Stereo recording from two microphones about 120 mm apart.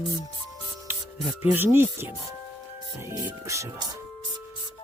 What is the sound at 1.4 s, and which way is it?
Speech, 15° right (ahead or behind).